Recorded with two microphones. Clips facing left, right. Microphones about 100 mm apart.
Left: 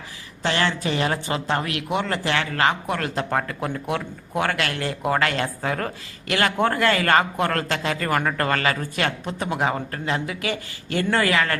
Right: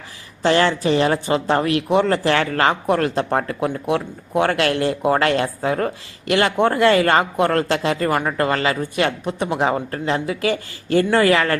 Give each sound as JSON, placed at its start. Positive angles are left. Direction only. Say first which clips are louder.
{"t": 0.4, "sound": "speech", "louder": "right 7 dB", "side_deg": -30}